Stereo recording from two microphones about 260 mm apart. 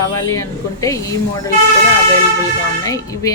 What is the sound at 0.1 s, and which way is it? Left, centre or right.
A woman's voice, centre.